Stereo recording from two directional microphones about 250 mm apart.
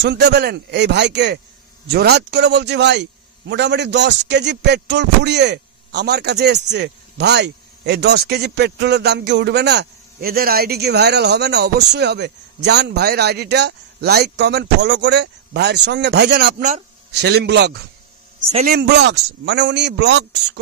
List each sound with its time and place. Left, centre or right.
0.0 s a man's voice: right